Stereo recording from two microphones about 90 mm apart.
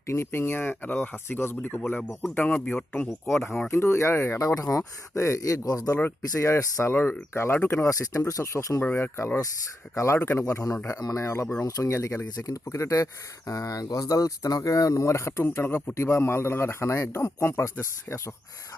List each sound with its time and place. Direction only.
0.1 s a man's voice: 25° left (ahead or behind)
3.2 s a man's voice: 30° left (ahead or behind)
6.0 s a man's voice: 30° left (ahead or behind)
6.9 s speech: 20° left (ahead or behind); by 8.8 s 35° left (ahead or behind)
8.8 s a man's voice: 20° left (ahead or behind)
9.1 s speech: 30° left (ahead or behind)
10.2 s a man's voice: 25° left (ahead or behind)
10.4 s a man's voice: 40° left (ahead or behind)